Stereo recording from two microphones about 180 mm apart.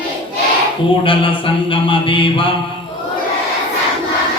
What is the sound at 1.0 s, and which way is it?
A man's voice, 30° left (ahead or behind).